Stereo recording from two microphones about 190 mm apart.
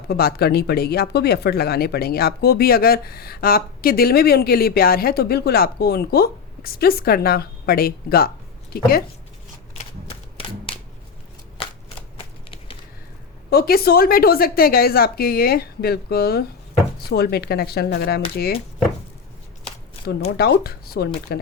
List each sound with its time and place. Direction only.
0.1 s speech: 55° left (ahead or behind)
9.7 s typewriter: 30° left (ahead or behind)
12.1 s a sound: 30° left (ahead or behind)
13.5 s speech: 55° left (ahead or behind)
20.3 s speech: 55° left (ahead or behind)